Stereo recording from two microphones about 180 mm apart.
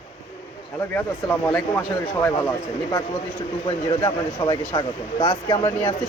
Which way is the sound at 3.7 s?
30° left (ahead or behind).